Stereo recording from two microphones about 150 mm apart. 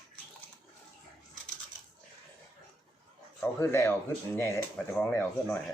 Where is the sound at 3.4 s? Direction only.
15° left (ahead or behind).